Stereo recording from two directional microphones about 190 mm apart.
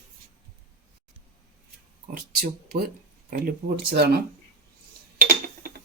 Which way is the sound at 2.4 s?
55° right (ahead or behind).